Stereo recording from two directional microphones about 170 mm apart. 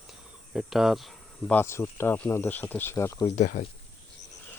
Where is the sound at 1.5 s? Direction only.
15° left (ahead or behind).